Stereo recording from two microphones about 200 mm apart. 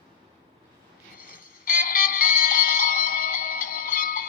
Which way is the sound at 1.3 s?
45° left (ahead or behind).